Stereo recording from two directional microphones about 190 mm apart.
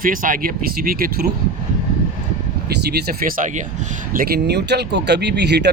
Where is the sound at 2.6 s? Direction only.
55° right (ahead or behind).